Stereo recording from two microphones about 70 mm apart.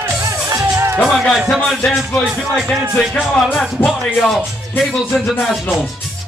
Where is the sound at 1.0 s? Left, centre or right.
Centre.